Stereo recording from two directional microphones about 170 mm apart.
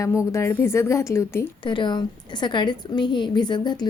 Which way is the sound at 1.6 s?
25° left (ahead or behind).